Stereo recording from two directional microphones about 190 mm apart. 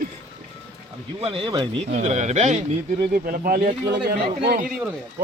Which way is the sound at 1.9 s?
40° right (ahead or behind).